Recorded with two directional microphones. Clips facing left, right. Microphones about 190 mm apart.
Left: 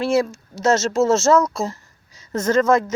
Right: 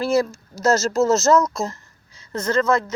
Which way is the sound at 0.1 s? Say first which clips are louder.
Left 1 dB; 25° left (ahead or behind).